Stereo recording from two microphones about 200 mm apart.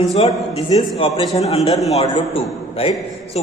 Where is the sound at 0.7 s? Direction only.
25° left (ahead or behind).